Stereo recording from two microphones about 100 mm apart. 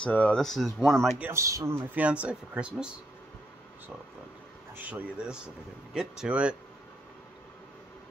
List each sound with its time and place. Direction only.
0.0 s speech: 15° left (ahead or behind)
1.3 s speech: 30° right (ahead or behind)
2.0 s speech: 15° right (ahead or behind)
4.7 s speech: 15° right (ahead or behind)